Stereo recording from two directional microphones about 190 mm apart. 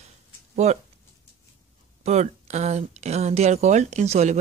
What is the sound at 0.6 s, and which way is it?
Speech, 35° right (ahead or behind).